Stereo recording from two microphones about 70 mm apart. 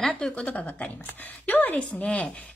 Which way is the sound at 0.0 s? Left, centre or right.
Centre.